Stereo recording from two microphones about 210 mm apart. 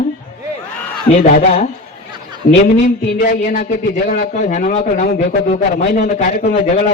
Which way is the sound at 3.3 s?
45° left (ahead or behind).